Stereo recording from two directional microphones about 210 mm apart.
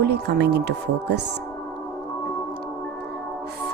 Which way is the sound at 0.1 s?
50° right (ahead or behind).